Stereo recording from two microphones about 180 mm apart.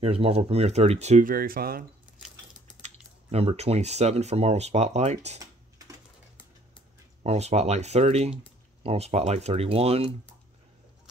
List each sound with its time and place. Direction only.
0.0 s speech: 35° right (ahead or behind)
1.3 s speech: 55° right (ahead or behind)
3.3 s speech: 35° right (ahead or behind)
7.2 s speech: 35° right (ahead or behind)